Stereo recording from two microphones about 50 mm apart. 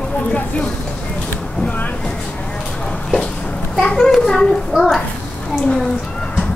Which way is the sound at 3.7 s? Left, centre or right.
Centre.